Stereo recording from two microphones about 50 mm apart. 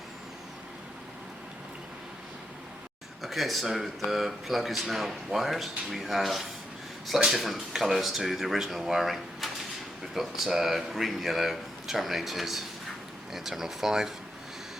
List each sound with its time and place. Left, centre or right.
3.2 s speech: centre